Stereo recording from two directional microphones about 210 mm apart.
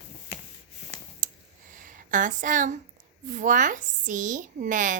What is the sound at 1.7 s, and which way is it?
A woman's voice, 40° right (ahead or behind).